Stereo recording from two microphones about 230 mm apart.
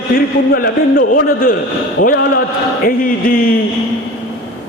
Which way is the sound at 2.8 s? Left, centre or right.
Left.